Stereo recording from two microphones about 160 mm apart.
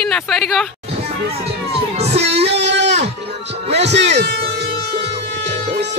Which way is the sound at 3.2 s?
90° right.